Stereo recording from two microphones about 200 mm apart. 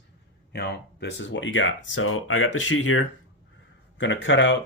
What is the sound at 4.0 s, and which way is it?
Speech, 65° left (ahead or behind).